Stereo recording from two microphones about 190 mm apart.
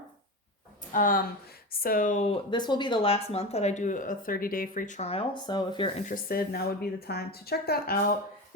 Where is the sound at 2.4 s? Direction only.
25° left (ahead or behind).